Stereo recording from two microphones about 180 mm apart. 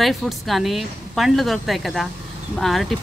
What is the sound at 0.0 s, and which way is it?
Speech, centre (ahead or behind).